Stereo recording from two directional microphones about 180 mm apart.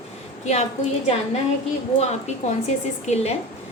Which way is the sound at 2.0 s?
40° left (ahead or behind).